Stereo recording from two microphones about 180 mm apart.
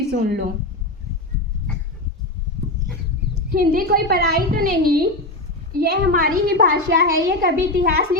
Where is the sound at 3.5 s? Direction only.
55° right (ahead or behind).